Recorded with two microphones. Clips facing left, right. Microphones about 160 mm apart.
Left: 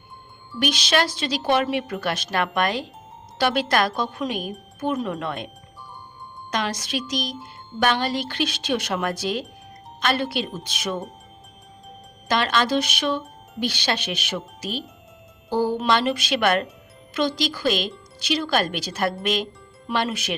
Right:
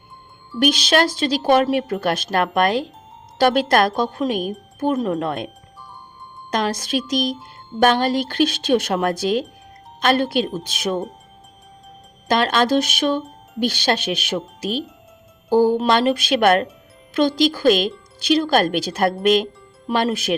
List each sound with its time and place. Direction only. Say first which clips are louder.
0.6 s a woman's voice: right 5 dB; 45° right (ahead or behind)
6.5 s a woman's voice: right 5 dB; 45° right (ahead or behind)
12.3 s a woman's voice: right 4 dB; 50° right (ahead or behind)